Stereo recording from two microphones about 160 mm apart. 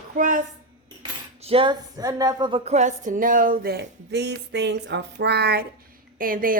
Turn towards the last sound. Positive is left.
turn(degrees=-60)  # may be behind; listen again after turning